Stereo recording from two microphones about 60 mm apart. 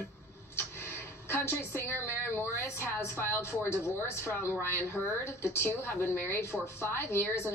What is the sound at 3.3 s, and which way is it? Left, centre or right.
A woman's voice, left.